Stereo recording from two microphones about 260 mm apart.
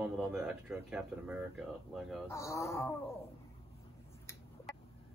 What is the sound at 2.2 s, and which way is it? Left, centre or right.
Speech, centre.